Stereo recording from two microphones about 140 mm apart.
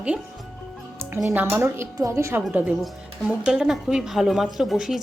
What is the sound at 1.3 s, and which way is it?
A woman's voice, 15° right (ahead or behind).